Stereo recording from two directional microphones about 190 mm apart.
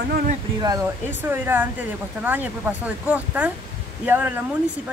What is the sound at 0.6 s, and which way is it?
Speech, 20° right (ahead or behind).